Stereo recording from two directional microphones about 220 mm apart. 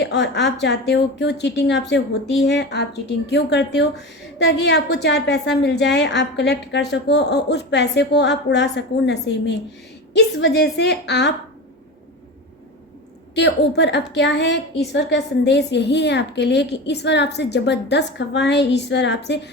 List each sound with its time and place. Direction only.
0.0 s a woman's voice: 50° left (ahead or behind)
13.3 s a woman's voice: 50° left (ahead or behind)